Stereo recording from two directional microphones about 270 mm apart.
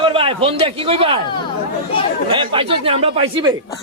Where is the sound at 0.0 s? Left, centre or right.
Centre.